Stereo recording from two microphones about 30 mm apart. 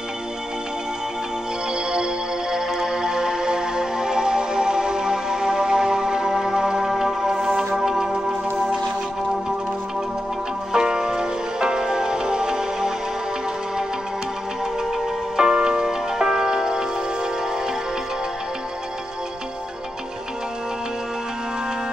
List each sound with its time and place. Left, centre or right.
2.8 s music: centre
10.7 s music: right
15.3 s music: right